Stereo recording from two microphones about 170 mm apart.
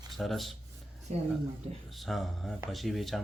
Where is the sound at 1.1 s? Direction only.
40° right (ahead or behind).